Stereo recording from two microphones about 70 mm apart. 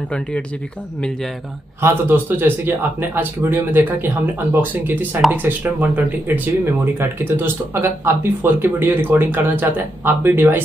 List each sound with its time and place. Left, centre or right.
1.8 s speech: right